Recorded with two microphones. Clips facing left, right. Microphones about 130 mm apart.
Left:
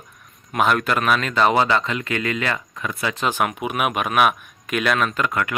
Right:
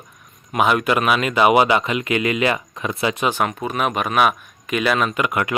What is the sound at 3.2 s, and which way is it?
Speech, centre (ahead or behind).